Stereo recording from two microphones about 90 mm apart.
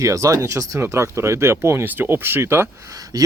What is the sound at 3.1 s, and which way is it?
Speech, 45° right (ahead or behind).